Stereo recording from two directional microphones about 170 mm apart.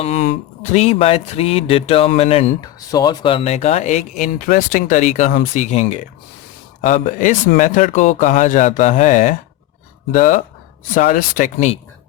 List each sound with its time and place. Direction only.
0.2 s speech: 60° left (ahead or behind)
0.7 s speech: 40° left (ahead or behind)
2.6 s speech: 25° left (ahead or behind); by 11.7 s 50° left (ahead or behind)